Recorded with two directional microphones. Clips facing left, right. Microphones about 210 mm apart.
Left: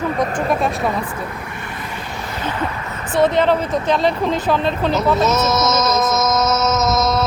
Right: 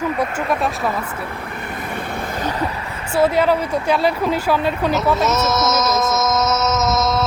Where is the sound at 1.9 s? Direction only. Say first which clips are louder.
Right 3 dB; 60° right (ahead or behind); by 2.6 s 40° right (ahead or behind).